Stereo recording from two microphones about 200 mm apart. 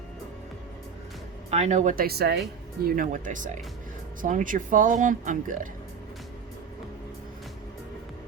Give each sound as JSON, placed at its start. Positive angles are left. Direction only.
{"t": 1.5, "sound": "speech", "side_deg": -35}